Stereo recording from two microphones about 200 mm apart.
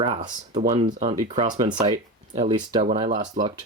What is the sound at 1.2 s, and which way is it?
Speech, 20° right (ahead or behind).